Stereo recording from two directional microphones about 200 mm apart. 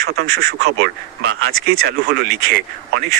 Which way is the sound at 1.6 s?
50° right (ahead or behind).